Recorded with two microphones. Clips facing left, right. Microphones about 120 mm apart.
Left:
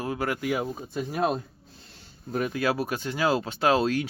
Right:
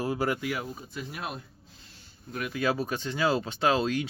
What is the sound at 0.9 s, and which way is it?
Speech, 40° left (ahead or behind).